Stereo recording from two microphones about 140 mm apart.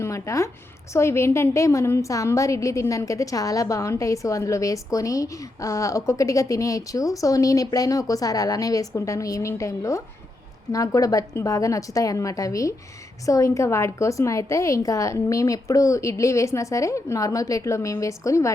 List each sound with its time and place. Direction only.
0.0 s a woman's voice: 20° left (ahead or behind)